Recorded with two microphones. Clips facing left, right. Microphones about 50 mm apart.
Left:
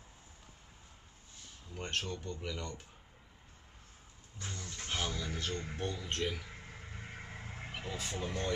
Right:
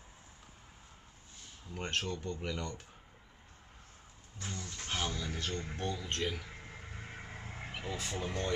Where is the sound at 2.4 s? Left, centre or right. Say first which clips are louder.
Right 3 dB; centre.